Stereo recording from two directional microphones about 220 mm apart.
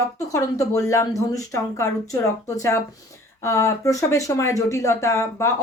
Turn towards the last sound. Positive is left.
turn(degrees=15)  # may be behind; listen again after turning